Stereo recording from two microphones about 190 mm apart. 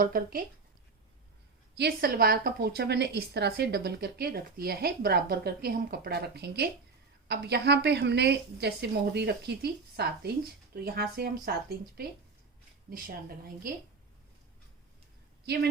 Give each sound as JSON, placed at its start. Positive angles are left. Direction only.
{"t": 0.0, "sound": "a woman's voice", "side_deg": -50}
{"t": 1.7, "sound": "a woman's voice", "side_deg": -60}
{"t": 12.9, "sound": "a woman's voice", "side_deg": -50}